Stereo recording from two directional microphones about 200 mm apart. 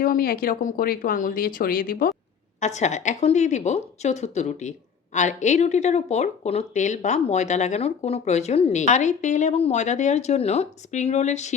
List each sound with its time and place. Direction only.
0.0 s speech: 45° left (ahead or behind)